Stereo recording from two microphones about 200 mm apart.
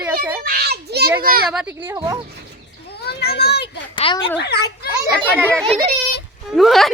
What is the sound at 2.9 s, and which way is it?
Children playing, 55° left (ahead or behind).